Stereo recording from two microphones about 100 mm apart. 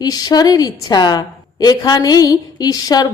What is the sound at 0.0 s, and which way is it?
A woman's voice, 40° left (ahead or behind).